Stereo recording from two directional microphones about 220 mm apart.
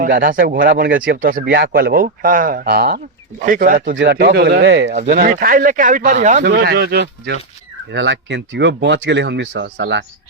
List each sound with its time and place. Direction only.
0.0 s speech: 40° right (ahead or behind)
3.9 s speech: 50° right (ahead or behind)